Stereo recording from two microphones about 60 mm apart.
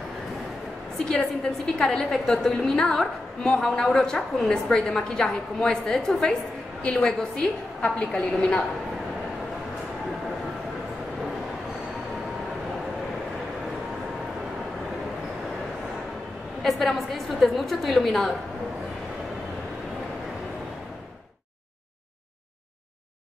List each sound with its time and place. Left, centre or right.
0.9 s a woman's voice: centre
16.6 s a woman's voice: centre